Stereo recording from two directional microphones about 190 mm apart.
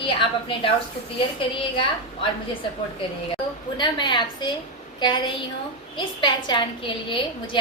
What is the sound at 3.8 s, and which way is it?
A woman's voice, 25° left (ahead or behind).